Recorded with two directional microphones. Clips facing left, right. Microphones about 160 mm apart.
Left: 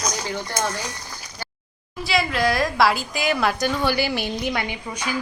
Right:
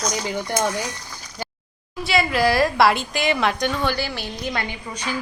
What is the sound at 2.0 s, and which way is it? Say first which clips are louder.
A woman's voice: right 2 dB; centre (ahead or behind).